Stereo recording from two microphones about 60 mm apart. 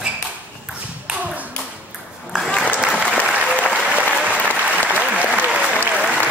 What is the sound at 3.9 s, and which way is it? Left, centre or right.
Applause, right.